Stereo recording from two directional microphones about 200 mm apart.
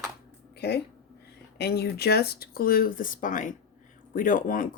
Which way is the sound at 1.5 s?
55° left (ahead or behind).